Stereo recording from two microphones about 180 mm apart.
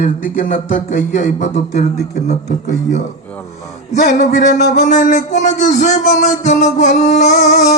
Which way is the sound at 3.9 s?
40° left (ahead or behind).